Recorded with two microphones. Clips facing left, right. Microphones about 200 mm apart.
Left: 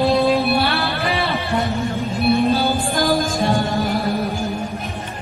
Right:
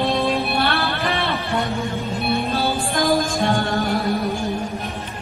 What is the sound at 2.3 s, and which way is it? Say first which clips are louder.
Music: left 5 dB; centre (ahead or behind).